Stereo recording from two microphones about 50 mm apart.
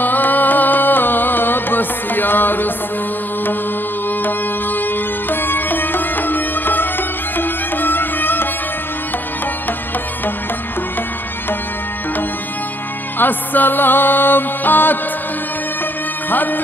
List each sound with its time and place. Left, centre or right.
0.0 s music: left
4.2 s music: left
13.2 s music: left
16.3 s music: left